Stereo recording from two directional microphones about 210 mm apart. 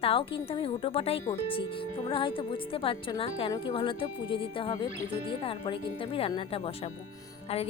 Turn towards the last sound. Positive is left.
turn(degrees=30)  # may be behind; listen again after turning